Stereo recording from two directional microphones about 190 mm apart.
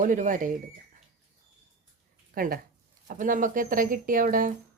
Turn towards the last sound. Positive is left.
turn(degrees=-45)  # may be behind; listen again after turning